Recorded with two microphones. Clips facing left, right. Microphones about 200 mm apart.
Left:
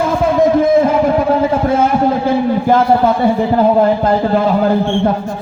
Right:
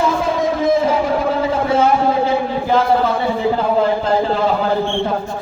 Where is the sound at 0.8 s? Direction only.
50° left (ahead or behind).